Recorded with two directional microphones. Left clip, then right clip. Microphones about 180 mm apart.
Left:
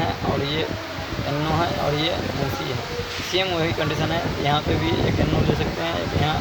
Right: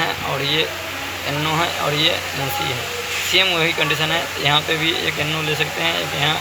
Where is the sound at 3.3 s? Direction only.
20° left (ahead or behind).